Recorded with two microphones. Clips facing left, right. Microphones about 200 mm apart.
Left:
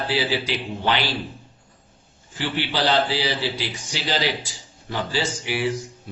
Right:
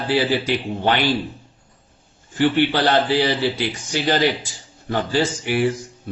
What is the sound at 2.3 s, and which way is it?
A man's voice, 55° right (ahead or behind).